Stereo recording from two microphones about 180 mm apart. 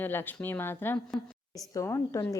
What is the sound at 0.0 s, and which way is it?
Speech, 10° left (ahead or behind).